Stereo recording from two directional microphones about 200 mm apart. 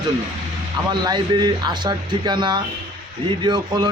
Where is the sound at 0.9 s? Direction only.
20° right (ahead or behind).